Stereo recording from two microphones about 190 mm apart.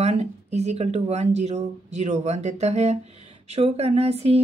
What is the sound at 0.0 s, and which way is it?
Speech, 35° right (ahead or behind).